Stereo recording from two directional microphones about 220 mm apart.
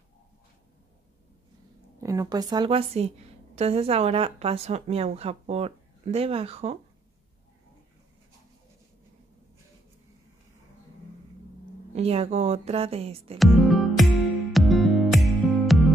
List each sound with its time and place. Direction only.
2.0 s a woman's voice: 15° right (ahead or behind)
11.9 s a woman's voice: 25° right (ahead or behind)
13.4 s music: centre (ahead or behind)